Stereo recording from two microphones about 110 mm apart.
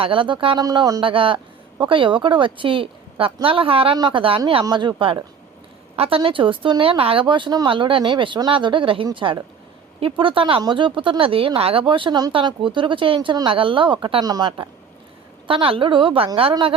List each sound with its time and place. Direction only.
0.0 s speech: 50° right (ahead or behind)
0.6 s speech: 35° right (ahead or behind)
1.0 s speech: 50° right (ahead or behind)
4.6 s speech: 40° right (ahead or behind)
15.4 s speech: 55° right (ahead or behind)